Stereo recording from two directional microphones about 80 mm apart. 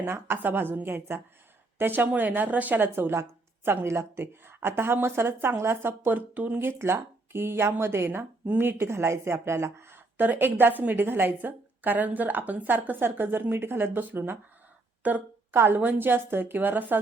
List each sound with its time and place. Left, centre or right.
0.0 s speech: right